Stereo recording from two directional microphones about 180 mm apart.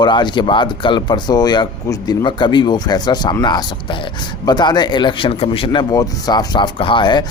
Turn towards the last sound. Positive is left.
turn(degrees=25)  # may be behind; listen again after turning